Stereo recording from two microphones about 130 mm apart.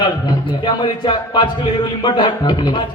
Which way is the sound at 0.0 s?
35° left (ahead or behind).